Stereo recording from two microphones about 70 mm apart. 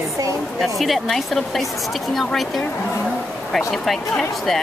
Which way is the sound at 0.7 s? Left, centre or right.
Centre.